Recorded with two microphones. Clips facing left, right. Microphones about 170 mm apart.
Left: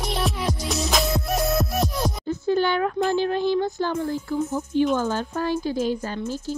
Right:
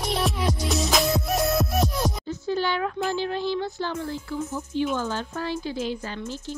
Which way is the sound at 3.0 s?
50° left (ahead or behind).